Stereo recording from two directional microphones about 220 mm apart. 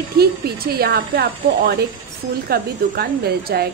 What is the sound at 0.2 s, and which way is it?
A woman's voice, 45° right (ahead or behind).